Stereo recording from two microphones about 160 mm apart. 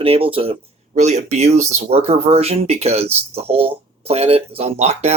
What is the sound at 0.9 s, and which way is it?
Speech, 45° right (ahead or behind).